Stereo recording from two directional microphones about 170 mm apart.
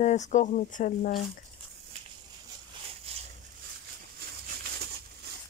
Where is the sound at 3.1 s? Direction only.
35° right (ahead or behind).